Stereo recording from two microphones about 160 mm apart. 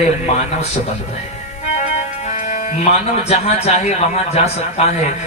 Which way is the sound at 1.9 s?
45° left (ahead or behind).